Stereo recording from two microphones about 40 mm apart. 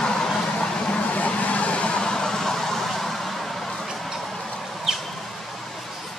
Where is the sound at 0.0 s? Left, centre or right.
Centre.